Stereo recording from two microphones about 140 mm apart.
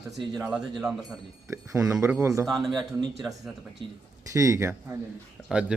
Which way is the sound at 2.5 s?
Centre (ahead or behind).